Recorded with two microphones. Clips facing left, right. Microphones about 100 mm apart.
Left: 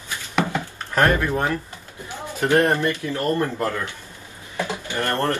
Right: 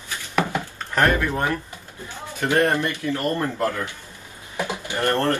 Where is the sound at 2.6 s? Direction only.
20° left (ahead or behind).